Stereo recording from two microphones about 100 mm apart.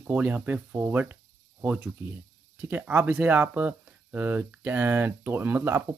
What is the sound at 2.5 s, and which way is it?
Speech, 15° right (ahead or behind).